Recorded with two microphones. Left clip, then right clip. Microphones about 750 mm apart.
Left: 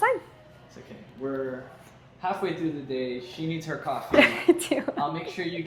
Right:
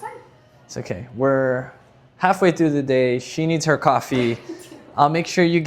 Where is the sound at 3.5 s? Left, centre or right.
Right.